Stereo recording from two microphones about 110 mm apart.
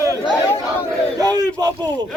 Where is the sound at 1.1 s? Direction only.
35° right (ahead or behind).